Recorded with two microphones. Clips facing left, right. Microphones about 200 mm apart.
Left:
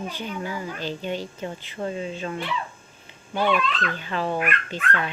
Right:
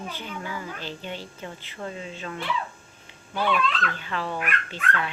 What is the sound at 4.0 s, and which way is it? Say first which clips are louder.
Speech: left 3 dB; 20° left (ahead or behind).